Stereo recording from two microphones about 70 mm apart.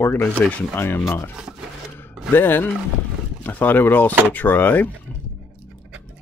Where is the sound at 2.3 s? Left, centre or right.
Left.